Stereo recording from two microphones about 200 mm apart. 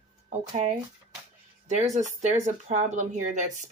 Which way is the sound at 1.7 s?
35° right (ahead or behind).